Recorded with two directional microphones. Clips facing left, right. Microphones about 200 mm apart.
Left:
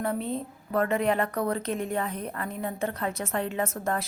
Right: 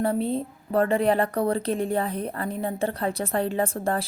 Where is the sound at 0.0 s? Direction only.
30° right (ahead or behind).